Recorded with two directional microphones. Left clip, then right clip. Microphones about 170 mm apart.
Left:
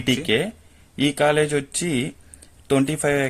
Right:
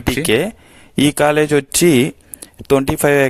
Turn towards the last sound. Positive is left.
turn(degrees=-60)  # may be behind; listen again after turning